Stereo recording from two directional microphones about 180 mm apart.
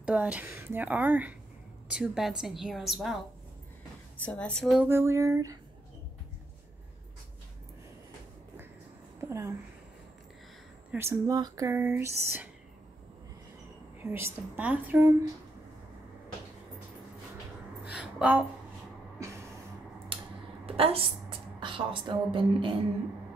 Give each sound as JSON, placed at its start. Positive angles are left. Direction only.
{"t": 0.0, "sound": "a woman's voice", "side_deg": -5}
{"t": 4.2, "sound": "a woman's voice", "side_deg": 5}
{"t": 4.8, "sound": "speech", "side_deg": -15}
{"t": 9.3, "sound": "speech", "side_deg": -15}
{"t": 10.9, "sound": "speech", "side_deg": -15}
{"t": 14.0, "sound": "speech", "side_deg": -15}
{"t": 17.9, "sound": "a sound", "side_deg": -5}
{"t": 20.1, "sound": "a sound", "side_deg": -30}
{"t": 20.6, "sound": "a woman's voice", "side_deg": -30}